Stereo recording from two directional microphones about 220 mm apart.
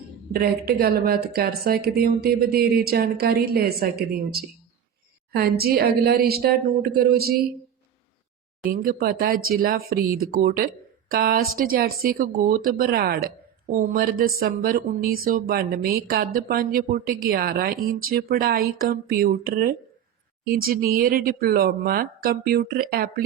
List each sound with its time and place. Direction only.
0.3 s a woman's voice: 45° right (ahead or behind)
8.6 s a woman's voice: 40° right (ahead or behind)